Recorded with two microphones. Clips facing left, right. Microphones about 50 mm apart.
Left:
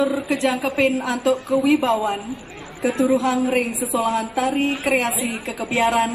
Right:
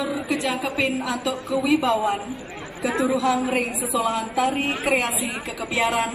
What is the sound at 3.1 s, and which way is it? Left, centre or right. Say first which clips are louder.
A woman's voice: left 1 dB; left.